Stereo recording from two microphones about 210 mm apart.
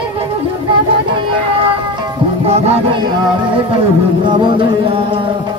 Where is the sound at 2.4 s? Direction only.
30° right (ahead or behind).